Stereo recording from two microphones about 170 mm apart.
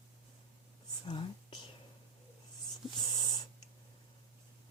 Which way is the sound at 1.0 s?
30° left (ahead or behind).